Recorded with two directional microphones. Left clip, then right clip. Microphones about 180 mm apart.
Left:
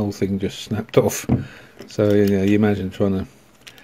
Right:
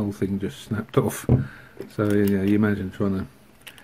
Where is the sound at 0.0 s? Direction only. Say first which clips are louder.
Left 4 dB; 20° left (ahead or behind).